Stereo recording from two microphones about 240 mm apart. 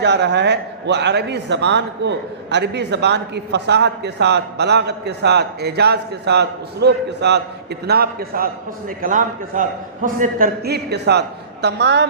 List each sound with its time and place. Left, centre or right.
0.0 s a man's voice: right